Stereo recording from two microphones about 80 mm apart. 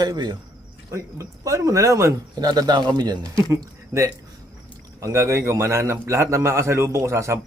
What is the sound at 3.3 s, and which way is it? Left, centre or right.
A man's voice, right.